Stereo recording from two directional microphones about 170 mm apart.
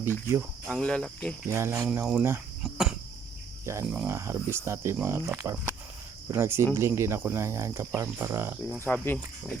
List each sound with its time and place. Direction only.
0.0 s speech: 15° right (ahead or behind)
0.7 s cricket: 5° left (ahead or behind)
1.5 s speech: 15° right (ahead or behind)
2.6 s cricket: 5° right (ahead or behind)
4.1 s speech: 15° right (ahead or behind)
8.8 s speech: 10° left (ahead or behind)